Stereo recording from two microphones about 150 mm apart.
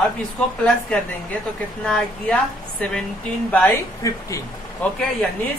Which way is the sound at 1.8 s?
5° left (ahead or behind).